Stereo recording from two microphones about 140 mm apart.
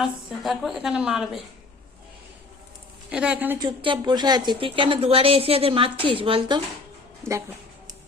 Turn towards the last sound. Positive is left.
turn(degrees=-20)  # may be behind; listen again after turning